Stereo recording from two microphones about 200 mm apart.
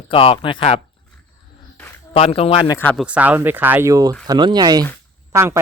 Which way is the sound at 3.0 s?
5° right (ahead or behind).